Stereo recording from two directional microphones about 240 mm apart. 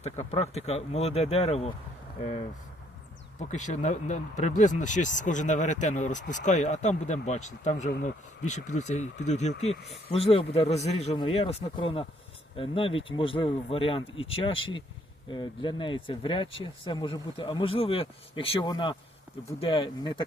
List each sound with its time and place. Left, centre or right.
0.0 s speech: left
3.3 s speech: left